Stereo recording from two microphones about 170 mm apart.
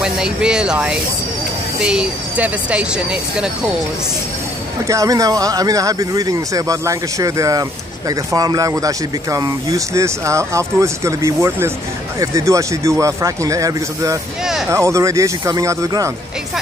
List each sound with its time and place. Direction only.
0.0 s speech: 5° right (ahead or behind)
4.8 s speech: 20° right (ahead or behind)